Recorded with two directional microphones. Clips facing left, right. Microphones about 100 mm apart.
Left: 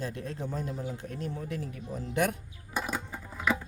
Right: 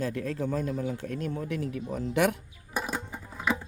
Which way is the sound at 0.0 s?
70° right (ahead or behind).